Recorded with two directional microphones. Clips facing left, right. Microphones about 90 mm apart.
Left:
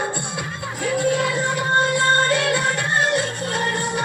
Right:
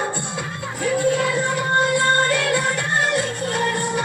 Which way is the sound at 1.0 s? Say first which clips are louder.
Even; 20° left (ahead or behind).